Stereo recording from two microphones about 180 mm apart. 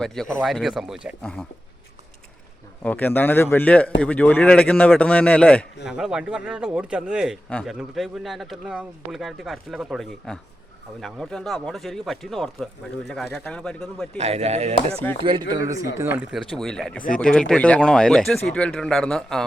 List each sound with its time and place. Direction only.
0.0 s speech: 5° left (ahead or behind)
2.8 s a man's voice: 10° left (ahead or behind)
5.8 s speech: 5° right (ahead or behind)
14.2 s chopping: 35° right (ahead or behind)
15.2 s speech: 25° right (ahead or behind)
16.0 s speech: 10° right (ahead or behind)